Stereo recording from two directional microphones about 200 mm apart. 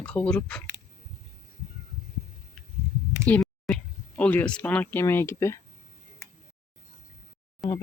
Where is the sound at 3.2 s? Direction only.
5° left (ahead or behind).